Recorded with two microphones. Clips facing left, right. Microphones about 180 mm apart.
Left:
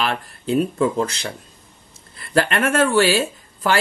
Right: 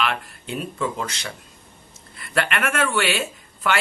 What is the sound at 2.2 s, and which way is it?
Speech, 35° left (ahead or behind).